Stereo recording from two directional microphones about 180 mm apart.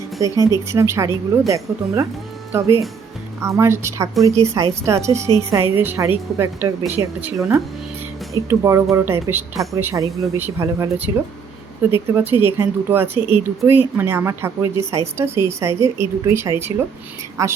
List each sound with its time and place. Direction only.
0.2 s speech: 20° right (ahead or behind)